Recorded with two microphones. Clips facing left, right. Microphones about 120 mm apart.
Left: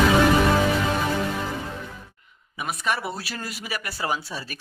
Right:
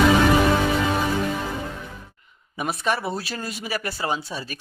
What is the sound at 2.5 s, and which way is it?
Speech, 30° right (ahead or behind).